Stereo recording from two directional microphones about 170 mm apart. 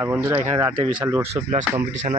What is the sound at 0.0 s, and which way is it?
Speech, 15° right (ahead or behind).